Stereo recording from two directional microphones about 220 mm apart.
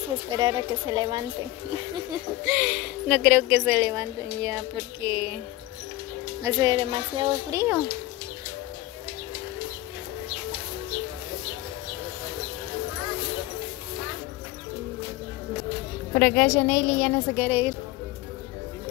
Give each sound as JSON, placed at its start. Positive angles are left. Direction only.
{"t": 0.4, "sound": "a woman's voice", "side_deg": -20}
{"t": 2.4, "sound": "speech", "side_deg": -10}
{"t": 6.4, "sound": "a woman's voice", "side_deg": -20}
{"t": 16.1, "sound": "a woman's voice", "side_deg": 5}
{"t": 17.5, "sound": "speech", "side_deg": -10}